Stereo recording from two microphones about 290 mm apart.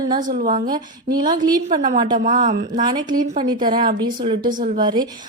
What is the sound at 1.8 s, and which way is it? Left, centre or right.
A woman's voice, right.